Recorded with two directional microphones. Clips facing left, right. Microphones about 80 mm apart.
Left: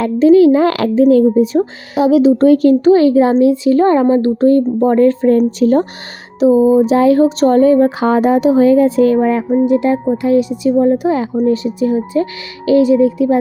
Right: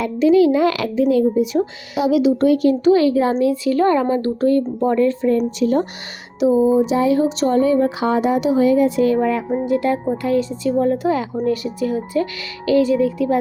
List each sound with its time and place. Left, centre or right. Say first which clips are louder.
0.0 s speech: left 6 dB; left
6.4 s speech: left 5 dB; left
6.9 s speech: left 6 dB; left
9.5 s speech: left 6 dB; left